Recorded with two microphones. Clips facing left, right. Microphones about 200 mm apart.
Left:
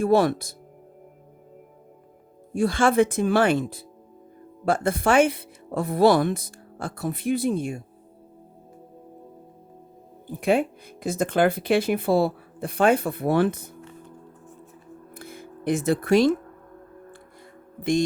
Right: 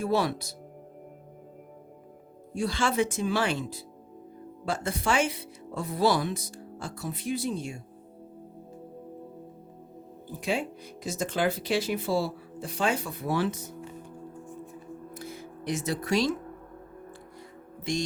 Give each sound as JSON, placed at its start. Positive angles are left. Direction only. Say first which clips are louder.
{"t": 0.0, "sound": "speech", "louder": "left 7 dB", "side_deg": 50}
{"t": 2.5, "sound": "speech", "louder": "left 7 dB", "side_deg": 50}
{"t": 10.4, "sound": "speech", "louder": "left 8 dB", "side_deg": 55}
{"t": 15.1, "sound": "music", "louder": "right 1 dB", "side_deg": 55}